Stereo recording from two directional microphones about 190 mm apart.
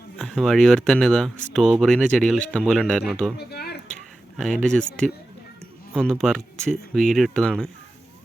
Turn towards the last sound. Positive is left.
turn(degrees=5)  # may be behind; listen again after turning